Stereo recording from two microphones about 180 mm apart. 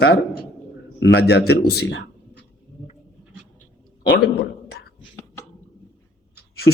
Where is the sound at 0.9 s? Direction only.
75° left (ahead or behind).